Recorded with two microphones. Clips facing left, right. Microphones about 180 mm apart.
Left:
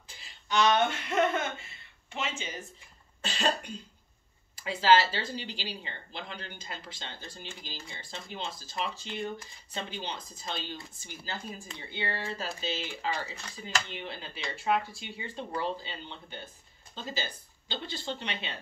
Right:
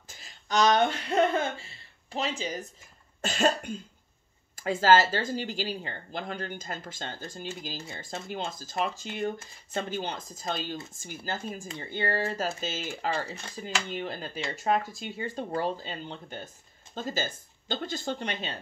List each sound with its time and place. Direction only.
0.1 s speech: 45° right (ahead or behind)